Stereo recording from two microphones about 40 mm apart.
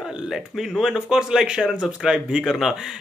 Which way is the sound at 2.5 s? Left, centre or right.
Centre.